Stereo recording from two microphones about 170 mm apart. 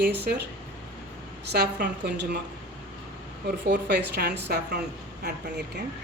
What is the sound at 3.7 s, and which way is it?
Speech, 90° right.